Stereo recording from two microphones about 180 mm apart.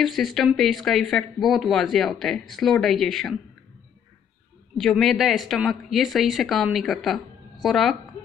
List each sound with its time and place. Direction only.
0.0 s speech: centre (ahead or behind)
4.7 s speech: centre (ahead or behind)